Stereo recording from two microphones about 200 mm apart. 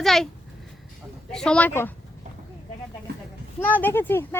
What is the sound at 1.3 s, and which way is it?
Speech, 5° left (ahead or behind).